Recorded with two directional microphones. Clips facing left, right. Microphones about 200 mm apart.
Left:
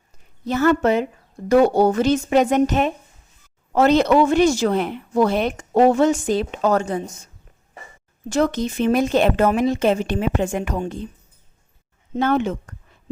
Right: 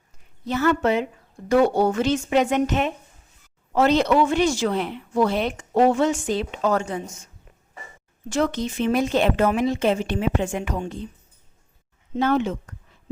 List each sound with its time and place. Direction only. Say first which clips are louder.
0.4 s a woman's voice: left 3 dB; 45° left (ahead or behind)
8.3 s a woman's voice: left 3 dB; 40° left (ahead or behind)
12.1 s a woman's voice: left 2 dB; 55° left (ahead or behind)